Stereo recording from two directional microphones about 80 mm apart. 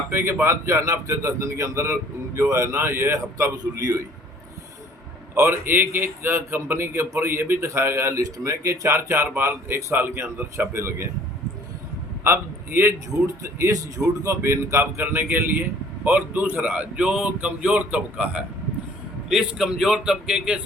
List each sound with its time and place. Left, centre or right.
0.1 s a man's voice: right
5.3 s a man's voice: right
8.2 s a man's voice: right
12.2 s a man's voice: right; by 18.4 s centre
19.3 s a man's voice: centre